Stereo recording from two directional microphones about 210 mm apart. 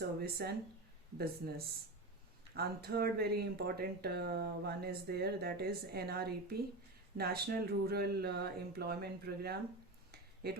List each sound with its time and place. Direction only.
0.2 s speech: 50° right (ahead or behind)